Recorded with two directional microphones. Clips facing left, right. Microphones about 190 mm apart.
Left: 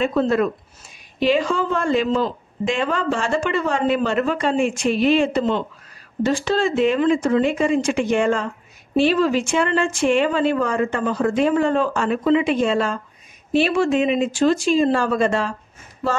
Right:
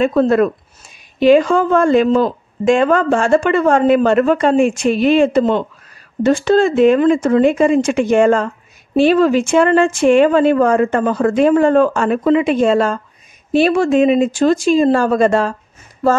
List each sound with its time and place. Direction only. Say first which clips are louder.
0.0 s a woman's voice: right 6 dB; 50° right (ahead or behind)